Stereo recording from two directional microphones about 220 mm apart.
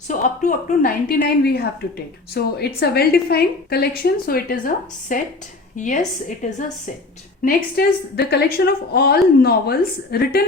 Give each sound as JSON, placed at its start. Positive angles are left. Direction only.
{"t": 0.1, "sound": "a woman's voice", "side_deg": 35}